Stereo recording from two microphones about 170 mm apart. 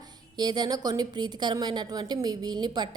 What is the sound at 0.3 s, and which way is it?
A woman's voice, 25° right (ahead or behind).